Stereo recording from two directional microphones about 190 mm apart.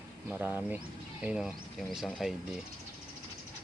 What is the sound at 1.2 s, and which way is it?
Speech, 5° right (ahead or behind).